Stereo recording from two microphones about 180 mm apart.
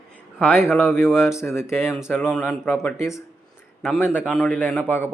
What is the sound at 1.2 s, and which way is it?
A man's voice, 15° left (ahead or behind).